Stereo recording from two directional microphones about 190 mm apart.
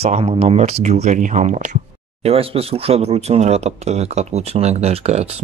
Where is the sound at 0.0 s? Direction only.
30° right (ahead or behind).